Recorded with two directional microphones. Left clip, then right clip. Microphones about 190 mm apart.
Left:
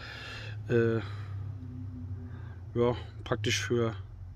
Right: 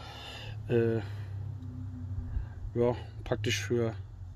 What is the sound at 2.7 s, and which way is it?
Speech, 10° left (ahead or behind).